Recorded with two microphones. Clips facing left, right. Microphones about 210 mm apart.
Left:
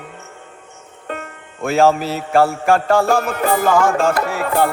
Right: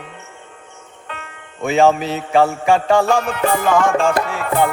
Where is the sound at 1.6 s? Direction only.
Centre (ahead or behind).